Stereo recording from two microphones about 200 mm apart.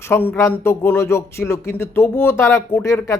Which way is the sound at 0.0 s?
10° left (ahead or behind).